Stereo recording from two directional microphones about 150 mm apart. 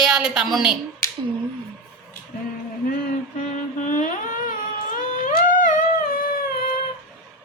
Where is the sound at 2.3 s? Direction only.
70° left (ahead or behind).